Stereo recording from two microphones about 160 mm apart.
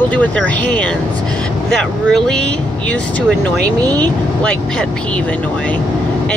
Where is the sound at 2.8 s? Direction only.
10° left (ahead or behind).